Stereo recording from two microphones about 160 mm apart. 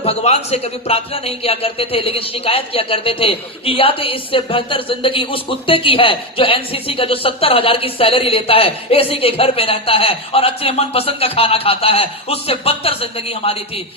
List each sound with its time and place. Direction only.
0.0 s a man's voice: 40° left (ahead or behind)